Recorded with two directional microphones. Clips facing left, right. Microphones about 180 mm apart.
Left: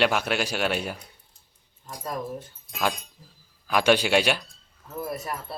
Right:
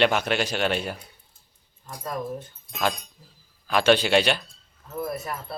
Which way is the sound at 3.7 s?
10° left (ahead or behind).